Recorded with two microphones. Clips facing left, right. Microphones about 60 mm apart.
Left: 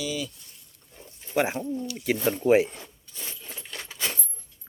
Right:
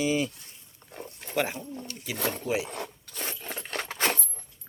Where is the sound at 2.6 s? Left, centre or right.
Right.